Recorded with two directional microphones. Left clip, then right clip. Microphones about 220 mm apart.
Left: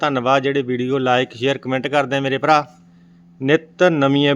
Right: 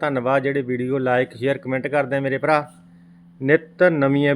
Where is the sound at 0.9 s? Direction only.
25° left (ahead or behind).